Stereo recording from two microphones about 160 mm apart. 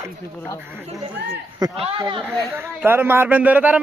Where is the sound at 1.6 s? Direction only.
25° right (ahead or behind).